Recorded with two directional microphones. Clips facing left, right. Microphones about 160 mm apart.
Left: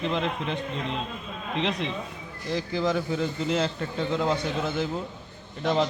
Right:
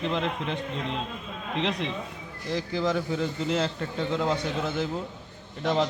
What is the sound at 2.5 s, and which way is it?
A man's voice, 5° left (ahead or behind).